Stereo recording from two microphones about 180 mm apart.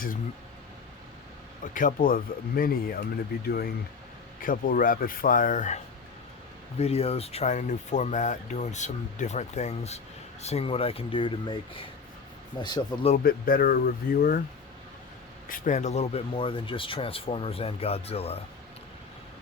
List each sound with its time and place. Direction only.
1.6 s speech: 50° left (ahead or behind)
4.4 s speech: 50° left (ahead or behind); by 13.1 s 25° left (ahead or behind)
13.1 s speech: 55° left (ahead or behind)
15.4 s speech: 45° left (ahead or behind)